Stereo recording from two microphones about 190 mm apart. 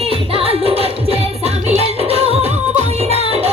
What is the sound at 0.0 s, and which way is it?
Music, 30° right (ahead or behind).